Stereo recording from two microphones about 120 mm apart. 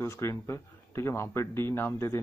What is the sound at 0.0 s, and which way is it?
Speech, 25° left (ahead or behind).